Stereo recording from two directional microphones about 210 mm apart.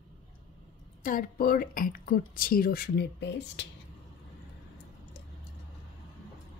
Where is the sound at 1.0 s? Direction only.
45° left (ahead or behind).